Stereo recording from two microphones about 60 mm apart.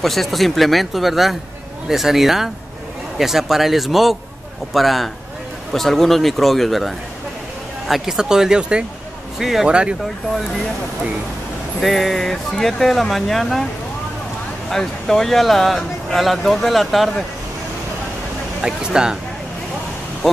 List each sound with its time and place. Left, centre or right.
0.0 s speech: centre
9.4 s speech: centre
9.7 s speech: centre
11.8 s speech: centre
14.7 s speech: centre
18.6 s speech: centre